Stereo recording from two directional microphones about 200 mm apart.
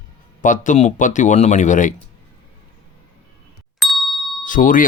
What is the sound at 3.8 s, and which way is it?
Ding, centre (ahead or behind).